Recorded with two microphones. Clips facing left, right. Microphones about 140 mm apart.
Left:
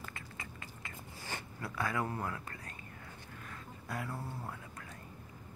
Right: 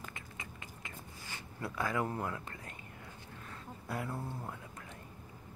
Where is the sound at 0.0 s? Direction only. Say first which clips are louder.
Even; 20° right (ahead or behind).